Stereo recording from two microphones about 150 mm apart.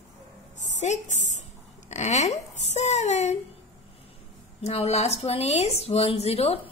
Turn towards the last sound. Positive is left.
turn(degrees=40)  # may be behind; listen again after turning